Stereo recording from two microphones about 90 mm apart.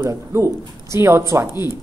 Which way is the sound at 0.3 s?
30° right (ahead or behind).